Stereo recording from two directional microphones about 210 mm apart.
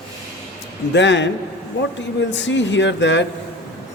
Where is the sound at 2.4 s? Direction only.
60° left (ahead or behind).